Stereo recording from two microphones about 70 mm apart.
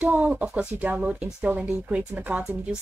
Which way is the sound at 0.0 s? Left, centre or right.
Centre.